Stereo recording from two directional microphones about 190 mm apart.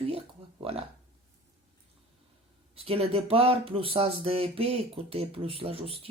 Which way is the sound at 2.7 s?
30° right (ahead or behind).